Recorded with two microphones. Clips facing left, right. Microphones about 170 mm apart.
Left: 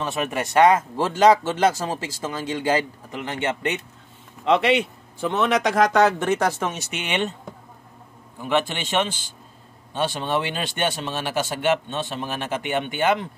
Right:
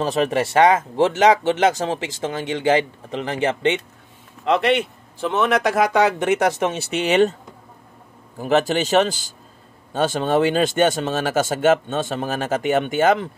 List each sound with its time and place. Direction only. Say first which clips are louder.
0.0 s speech: right 6 dB; 35° right (ahead or behind)
4.5 s a man's voice: right 1 dB; centre (ahead or behind); by 7.3 s 35° right (ahead or behind)
8.4 s speech: right 5 dB; 40° right (ahead or behind)